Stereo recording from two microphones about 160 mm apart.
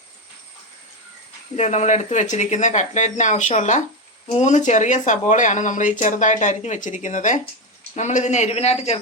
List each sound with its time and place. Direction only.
1.5 s speech: 45° left (ahead or behind)